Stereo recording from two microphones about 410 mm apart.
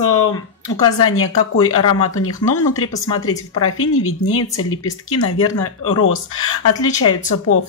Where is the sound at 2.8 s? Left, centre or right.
Centre.